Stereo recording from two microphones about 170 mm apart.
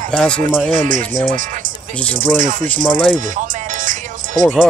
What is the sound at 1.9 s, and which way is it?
Speech, 5° left (ahead or behind).